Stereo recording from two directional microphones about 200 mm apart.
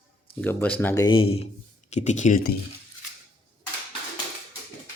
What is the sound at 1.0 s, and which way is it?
Speech, 25° left (ahead or behind).